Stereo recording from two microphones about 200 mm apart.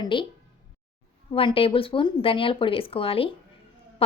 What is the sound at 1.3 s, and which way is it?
A woman's voice, 25° left (ahead or behind).